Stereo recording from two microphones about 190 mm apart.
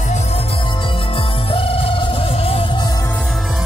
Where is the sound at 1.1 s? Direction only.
30° left (ahead or behind).